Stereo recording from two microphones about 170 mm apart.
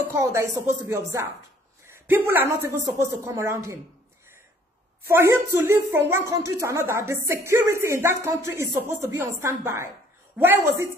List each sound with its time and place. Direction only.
0.2 s a woman's voice: 15° right (ahead or behind)
5.0 s speech: 15° right (ahead or behind)